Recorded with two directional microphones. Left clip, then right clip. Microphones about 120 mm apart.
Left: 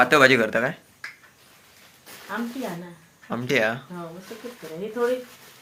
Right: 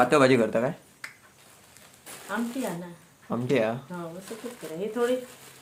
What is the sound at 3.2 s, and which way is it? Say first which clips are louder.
Speech: left 3 dB; 10° right (ahead or behind).